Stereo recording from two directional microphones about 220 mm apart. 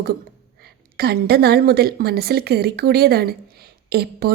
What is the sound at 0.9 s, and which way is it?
A woman's voice, 45° right (ahead or behind).